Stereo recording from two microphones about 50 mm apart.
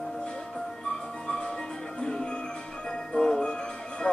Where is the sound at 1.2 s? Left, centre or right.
Centre.